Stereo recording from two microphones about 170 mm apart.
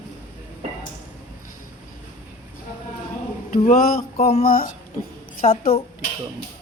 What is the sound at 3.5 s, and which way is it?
A woman's voice, 55° left (ahead or behind).